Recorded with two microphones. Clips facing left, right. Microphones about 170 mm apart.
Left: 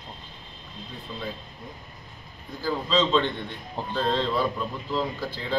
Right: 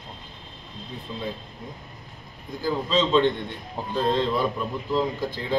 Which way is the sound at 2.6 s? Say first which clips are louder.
Right 1 dB; 15° right (ahead or behind).